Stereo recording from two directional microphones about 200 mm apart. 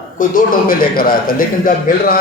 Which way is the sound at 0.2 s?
45° left (ahead or behind).